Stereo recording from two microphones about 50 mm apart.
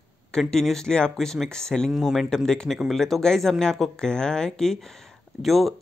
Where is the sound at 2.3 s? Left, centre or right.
Centre.